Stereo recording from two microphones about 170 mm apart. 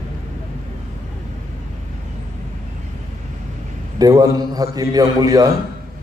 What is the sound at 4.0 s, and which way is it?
A man's voice, 20° right (ahead or behind).